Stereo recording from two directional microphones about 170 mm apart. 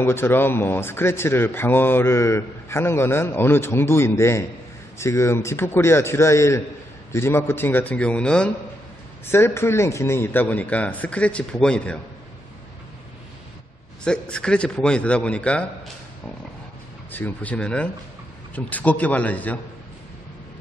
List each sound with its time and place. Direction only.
0.0 s speech: 15° left (ahead or behind)
14.0 s a man's voice: 5° left (ahead or behind)
17.1 s speech: 10° left (ahead or behind)